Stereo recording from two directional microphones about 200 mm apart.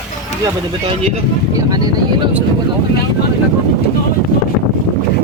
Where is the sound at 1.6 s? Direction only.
20° right (ahead or behind).